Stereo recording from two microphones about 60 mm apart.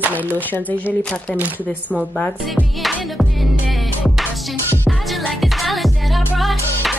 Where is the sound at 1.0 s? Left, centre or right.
Centre.